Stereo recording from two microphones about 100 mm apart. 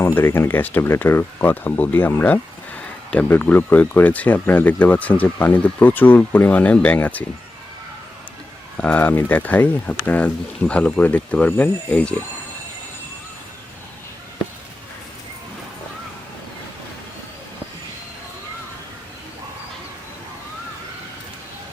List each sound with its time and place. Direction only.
0.0 s speech: 25° left (ahead or behind)
8.8 s speech: 15° left (ahead or behind)